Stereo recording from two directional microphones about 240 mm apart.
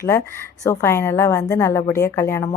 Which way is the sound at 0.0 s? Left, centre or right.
Centre.